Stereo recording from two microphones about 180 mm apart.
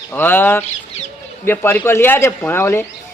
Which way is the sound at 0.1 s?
10° left (ahead or behind).